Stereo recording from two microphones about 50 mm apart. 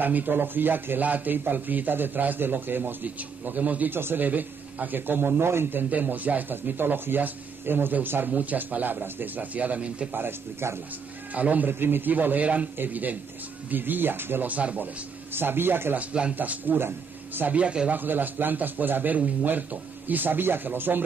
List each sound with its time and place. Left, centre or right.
0.0 s a man's voice: right
3.9 s a man's voice: right
4.3 s a man's voice: right
5.9 s a man's voice: right
10.1 s a man's voice: right
11.3 s a man's voice: right
14.5 s speech: right
15.3 s a man's voice: right
16.0 s speech: right
16.3 s a man's voice: right
17.5 s speech: right
17.9 s a man's voice: right